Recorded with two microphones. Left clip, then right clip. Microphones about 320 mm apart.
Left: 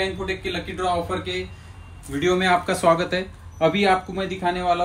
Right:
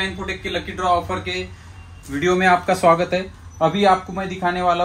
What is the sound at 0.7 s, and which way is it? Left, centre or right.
Speech, centre.